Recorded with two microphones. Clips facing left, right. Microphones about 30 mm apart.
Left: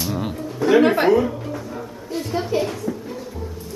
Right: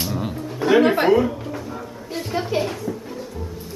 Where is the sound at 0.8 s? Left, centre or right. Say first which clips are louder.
Even; centre.